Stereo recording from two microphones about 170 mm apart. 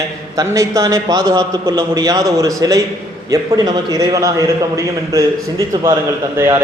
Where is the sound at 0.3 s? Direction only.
20° right (ahead or behind).